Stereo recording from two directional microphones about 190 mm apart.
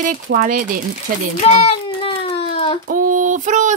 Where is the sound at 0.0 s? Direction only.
45° right (ahead or behind).